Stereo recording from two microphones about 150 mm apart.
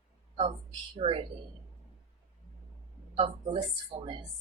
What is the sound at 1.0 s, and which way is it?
Speech, 40° right (ahead or behind).